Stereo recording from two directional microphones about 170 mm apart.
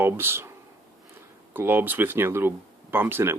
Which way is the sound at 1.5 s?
10° right (ahead or behind).